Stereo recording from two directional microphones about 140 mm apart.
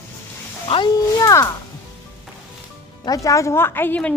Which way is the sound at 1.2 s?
20° left (ahead or behind).